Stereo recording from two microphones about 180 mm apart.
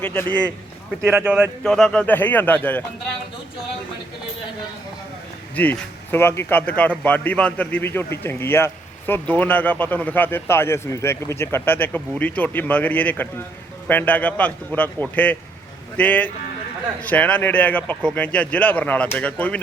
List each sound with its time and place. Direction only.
0.0 s a man's voice: 10° left (ahead or behind)
1.0 s speech: 10° right (ahead or behind)
1.6 s a man's voice: 5° left (ahead or behind)
5.5 s a man's voice: 10° left (ahead or behind)